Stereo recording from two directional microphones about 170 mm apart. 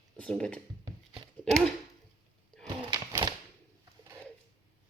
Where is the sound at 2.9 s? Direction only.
20° right (ahead or behind).